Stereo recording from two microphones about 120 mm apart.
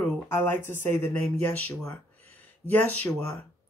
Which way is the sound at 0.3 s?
20° left (ahead or behind).